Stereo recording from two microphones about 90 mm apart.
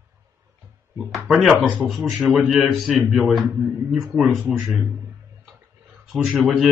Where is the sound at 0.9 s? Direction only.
Centre (ahead or behind).